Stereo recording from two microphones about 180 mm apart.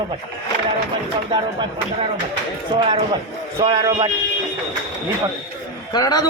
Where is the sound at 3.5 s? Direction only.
30° right (ahead or behind).